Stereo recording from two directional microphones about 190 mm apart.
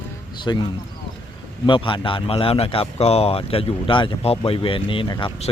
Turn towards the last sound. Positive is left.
turn(degrees=25)  # may be behind; listen again after turning